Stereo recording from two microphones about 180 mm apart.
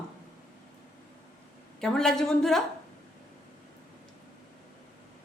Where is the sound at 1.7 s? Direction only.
Centre (ahead or behind).